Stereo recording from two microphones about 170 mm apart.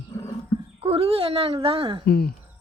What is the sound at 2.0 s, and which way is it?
Speech, 65° left (ahead or behind).